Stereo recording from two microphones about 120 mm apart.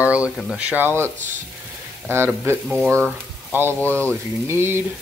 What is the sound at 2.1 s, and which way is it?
Frying, 20° right (ahead or behind).